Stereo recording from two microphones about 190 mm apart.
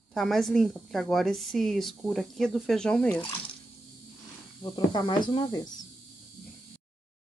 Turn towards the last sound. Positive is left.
turn(degrees=20)  # may be behind; listen again after turning